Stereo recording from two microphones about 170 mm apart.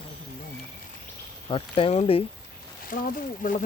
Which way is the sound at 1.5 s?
35° left (ahead or behind).